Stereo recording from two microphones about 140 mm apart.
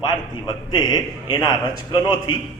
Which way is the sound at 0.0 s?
30° left (ahead or behind).